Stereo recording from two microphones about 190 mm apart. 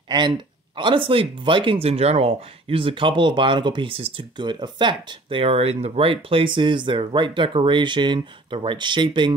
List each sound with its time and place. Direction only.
0.1 s speech: 25° right (ahead or behind)